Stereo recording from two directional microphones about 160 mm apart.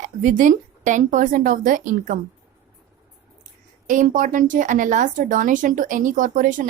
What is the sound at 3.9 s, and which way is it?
Speech, 55° right (ahead or behind).